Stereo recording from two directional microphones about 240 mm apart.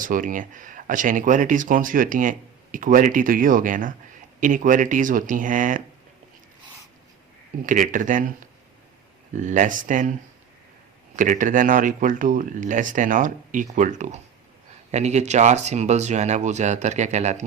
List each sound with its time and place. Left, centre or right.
0.0 s speech: right
7.6 s speech: right
11.2 s speech: right